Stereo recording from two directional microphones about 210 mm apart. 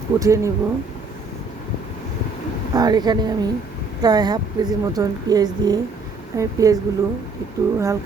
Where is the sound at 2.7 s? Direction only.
20° right (ahead or behind).